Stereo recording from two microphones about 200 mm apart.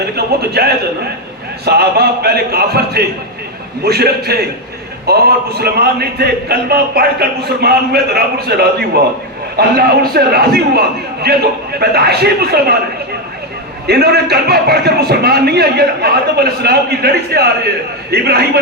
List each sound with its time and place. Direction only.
0.6 s speech: 50° right (ahead or behind)
13.8 s speech: 55° right (ahead or behind)